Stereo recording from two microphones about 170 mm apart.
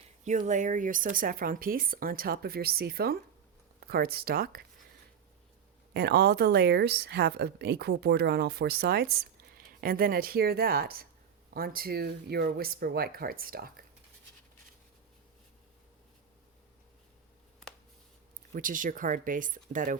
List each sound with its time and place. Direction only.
0.3 s speech: 45° right (ahead or behind); by 4.6 s 60° right (ahead or behind)
5.9 s a woman's voice: 70° right (ahead or behind)
18.5 s speech: 55° right (ahead or behind)